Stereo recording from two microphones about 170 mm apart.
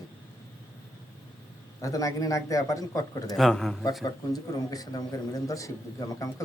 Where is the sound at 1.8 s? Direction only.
20° left (ahead or behind).